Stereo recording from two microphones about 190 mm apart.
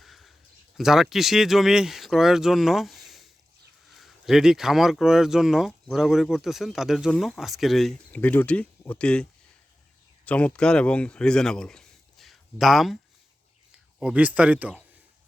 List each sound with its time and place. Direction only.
0.0 s a sound: centre (ahead or behind)
0.8 s speech: centre (ahead or behind)
10.2 s speech: 5° left (ahead or behind)
14.0 s speech: 5° right (ahead or behind)